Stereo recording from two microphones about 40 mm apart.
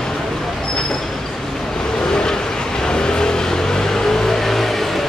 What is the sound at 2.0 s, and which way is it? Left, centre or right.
Vehicle, centre.